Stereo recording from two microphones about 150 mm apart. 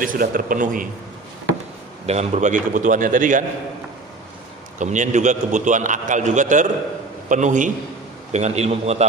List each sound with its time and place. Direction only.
0.0 s a man's voice: 65° right (ahead or behind)
2.0 s a man's voice: 45° right (ahead or behind)
4.7 s a man's voice: 55° right (ahead or behind)